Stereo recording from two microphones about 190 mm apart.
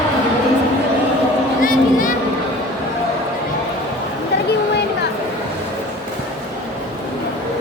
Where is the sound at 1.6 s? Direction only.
45° left (ahead or behind).